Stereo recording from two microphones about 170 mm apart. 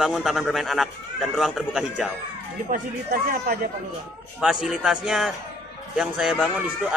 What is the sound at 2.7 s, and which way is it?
Speech, 60° right (ahead or behind).